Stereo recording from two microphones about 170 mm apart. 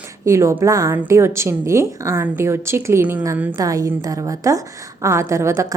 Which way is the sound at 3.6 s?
20° right (ahead or behind).